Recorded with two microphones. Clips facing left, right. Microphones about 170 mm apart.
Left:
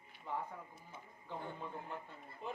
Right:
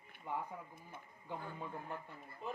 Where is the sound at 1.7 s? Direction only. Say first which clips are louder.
Right 1 dB; 20° left (ahead or behind).